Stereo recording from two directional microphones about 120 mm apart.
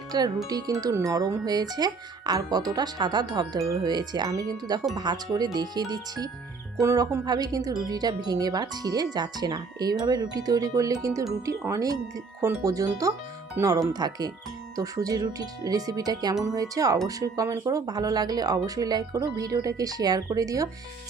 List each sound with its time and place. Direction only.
0.4 s speech: 30° right (ahead or behind)
11.4 s wind chime: 25° right (ahead or behind)
13.6 s speech: 30° right (ahead or behind)
16.4 s wind chime: 30° right (ahead or behind)
17.1 s speech: 30° right (ahead or behind)